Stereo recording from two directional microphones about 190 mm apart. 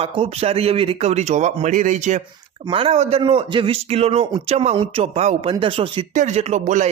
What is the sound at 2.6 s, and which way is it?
Speech, 30° right (ahead or behind).